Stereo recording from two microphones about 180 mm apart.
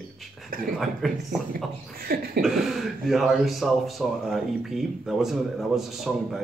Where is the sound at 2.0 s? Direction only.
55° right (ahead or behind).